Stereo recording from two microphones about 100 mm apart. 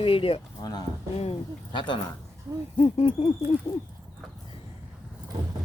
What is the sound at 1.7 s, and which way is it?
Speech, 55° left (ahead or behind).